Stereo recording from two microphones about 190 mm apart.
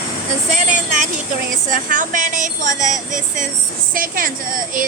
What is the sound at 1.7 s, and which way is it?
A woman's voice, 45° right (ahead or behind).